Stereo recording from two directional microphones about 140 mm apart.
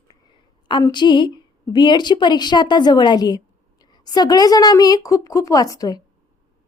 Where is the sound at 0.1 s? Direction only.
35° left (ahead or behind).